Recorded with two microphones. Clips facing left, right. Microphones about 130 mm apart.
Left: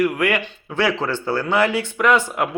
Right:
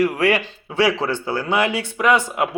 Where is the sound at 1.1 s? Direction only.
15° right (ahead or behind).